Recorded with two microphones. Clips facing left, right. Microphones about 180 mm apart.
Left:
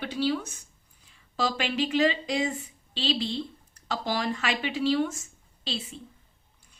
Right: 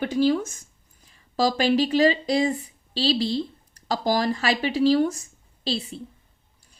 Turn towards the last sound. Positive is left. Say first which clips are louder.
# right 7 dB
turn(degrees=-35)  # may be behind; listen again after turning